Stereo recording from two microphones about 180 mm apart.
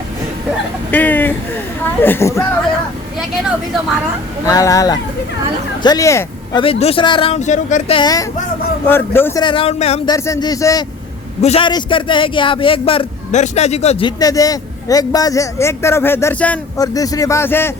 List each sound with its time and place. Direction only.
0.9 s a man's voice: 10° left (ahead or behind)
4.4 s a man's voice: 20° left (ahead or behind)
6.6 s speech: 35° left (ahead or behind)
7.9 s a man's voice: 20° left (ahead or behind)
9.4 s speech: 30° left (ahead or behind)
10.1 s a man's voice: 20° left (ahead or behind)
11.4 s a man's voice: 30° left (ahead or behind)
14.2 s a man's voice: 20° left (ahead or behind)
16.7 s a man's voice: 20° left (ahead or behind)